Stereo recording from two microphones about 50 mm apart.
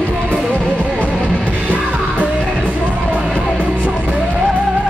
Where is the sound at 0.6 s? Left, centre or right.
Right.